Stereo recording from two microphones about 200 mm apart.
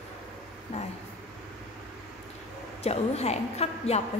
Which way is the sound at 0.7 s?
30° left (ahead or behind).